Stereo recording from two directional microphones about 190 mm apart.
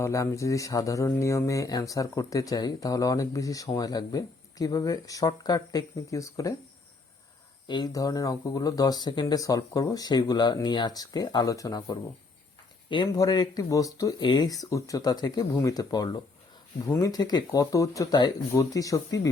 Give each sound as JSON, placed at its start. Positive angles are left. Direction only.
{"t": 0.0, "sound": "speech", "side_deg": 15}
{"t": 7.7, "sound": "speech", "side_deg": 20}